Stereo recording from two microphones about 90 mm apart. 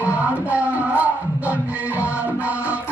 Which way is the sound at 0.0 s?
15° right (ahead or behind).